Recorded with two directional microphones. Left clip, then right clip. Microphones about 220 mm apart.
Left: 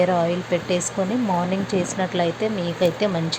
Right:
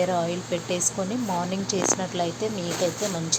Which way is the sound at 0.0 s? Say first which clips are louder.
Left 5 dB; 10° left (ahead or behind).